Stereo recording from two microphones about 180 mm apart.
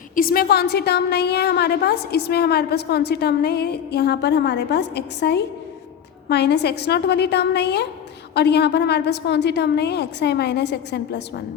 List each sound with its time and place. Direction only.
0.2 s a woman's voice: 55° left (ahead or behind)